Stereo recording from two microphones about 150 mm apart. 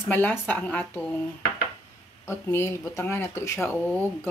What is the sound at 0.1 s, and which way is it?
Speech, 10° left (ahead or behind).